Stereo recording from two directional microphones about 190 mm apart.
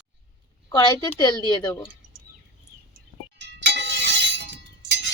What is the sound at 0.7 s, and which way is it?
A woman's voice, 20° left (ahead or behind).